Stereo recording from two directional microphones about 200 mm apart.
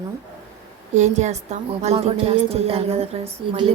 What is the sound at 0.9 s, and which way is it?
A woman's voice, 35° right (ahead or behind).